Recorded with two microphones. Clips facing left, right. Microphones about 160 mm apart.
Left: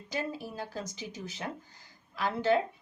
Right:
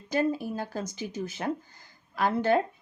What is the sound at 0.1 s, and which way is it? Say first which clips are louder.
Speech: right 9 dB; 55° right (ahead or behind).